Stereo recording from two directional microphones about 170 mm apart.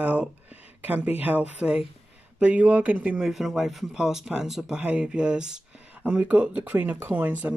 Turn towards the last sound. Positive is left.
turn(degrees=-10)  # may be behind; listen again after turning